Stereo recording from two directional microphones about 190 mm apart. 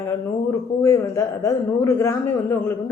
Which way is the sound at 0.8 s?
15° left (ahead or behind).